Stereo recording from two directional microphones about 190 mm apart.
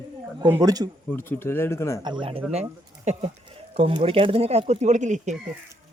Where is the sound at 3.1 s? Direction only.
35° right (ahead or behind).